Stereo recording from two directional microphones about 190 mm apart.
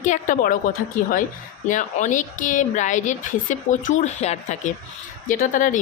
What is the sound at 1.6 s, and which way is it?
A woman's voice, 40° left (ahead or behind).